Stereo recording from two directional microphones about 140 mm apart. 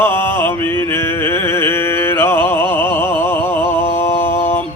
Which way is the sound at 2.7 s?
15° left (ahead or behind).